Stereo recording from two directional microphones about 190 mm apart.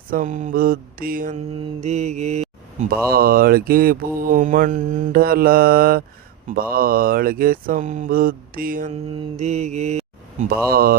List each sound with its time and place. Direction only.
0.1 s mantra: 40° right (ahead or behind)
1.8 s mantra: 35° right (ahead or behind)
3.1 s mantra: 50° right (ahead or behind)
10.7 s mantra: 50° right (ahead or behind)